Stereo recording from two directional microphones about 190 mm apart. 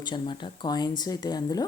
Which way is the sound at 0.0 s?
25° left (ahead or behind).